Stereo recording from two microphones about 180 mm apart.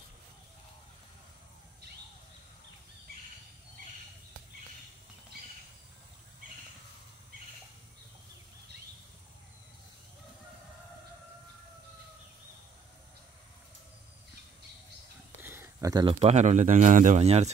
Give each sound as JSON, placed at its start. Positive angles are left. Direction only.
{"t": 15.4, "sound": "speech", "side_deg": -10}